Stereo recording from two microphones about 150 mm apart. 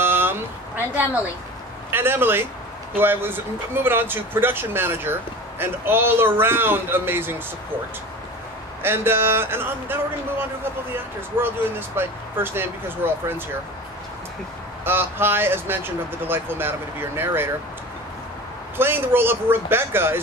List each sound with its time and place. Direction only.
0.0 s a sound: 15° right (ahead or behind)
1.9 s speech: 15° right (ahead or behind)
8.8 s speech: 15° right (ahead or behind)
14.9 s speech: 15° right (ahead or behind)
18.8 s speech: 15° right (ahead or behind)